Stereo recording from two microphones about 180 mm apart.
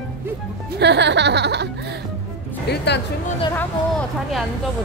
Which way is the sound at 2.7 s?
70° left (ahead or behind).